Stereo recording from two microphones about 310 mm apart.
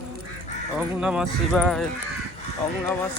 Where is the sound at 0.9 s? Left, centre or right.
Centre.